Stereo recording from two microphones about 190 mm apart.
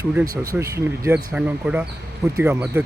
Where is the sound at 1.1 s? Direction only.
5° right (ahead or behind).